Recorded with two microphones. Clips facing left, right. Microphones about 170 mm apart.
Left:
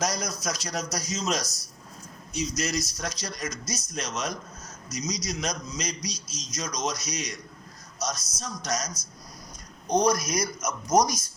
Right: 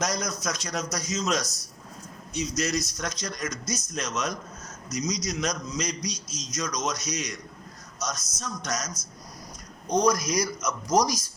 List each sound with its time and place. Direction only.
0.0 s a man's voice: 35° left (ahead or behind)
10.2 s a man's voice: 35° right (ahead or behind)